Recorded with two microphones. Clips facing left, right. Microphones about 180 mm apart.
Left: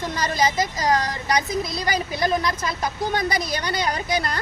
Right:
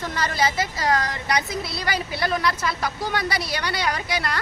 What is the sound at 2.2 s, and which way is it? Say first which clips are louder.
Speech: even; 20° left (ahead or behind).